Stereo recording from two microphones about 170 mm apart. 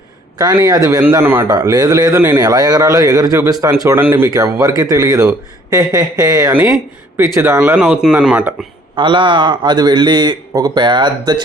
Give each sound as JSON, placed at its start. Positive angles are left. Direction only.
{"t": 0.3, "sound": "a man's voice", "side_deg": -20}
{"t": 7.6, "sound": "speech", "side_deg": -5}
{"t": 9.0, "sound": "a man's voice", "side_deg": -30}